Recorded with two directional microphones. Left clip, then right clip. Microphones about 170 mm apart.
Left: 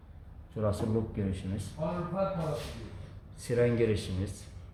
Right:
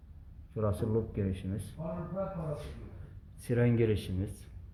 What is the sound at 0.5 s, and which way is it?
Speech, 25° right (ahead or behind).